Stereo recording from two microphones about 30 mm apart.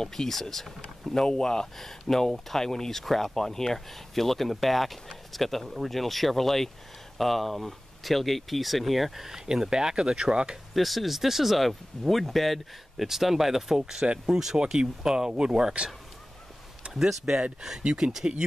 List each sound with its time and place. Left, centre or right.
0.0 s speech: centre
1.1 s speech: left
1.8 s speech: centre
9.5 s speech: right
10.7 s speech: centre
12.9 s speech: centre; by 15.7 s right
16.8 s a sound: right
17.3 s speech: centre
18.2 s speech: right